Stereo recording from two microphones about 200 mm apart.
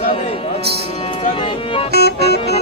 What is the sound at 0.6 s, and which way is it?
Music, 55° right (ahead or behind).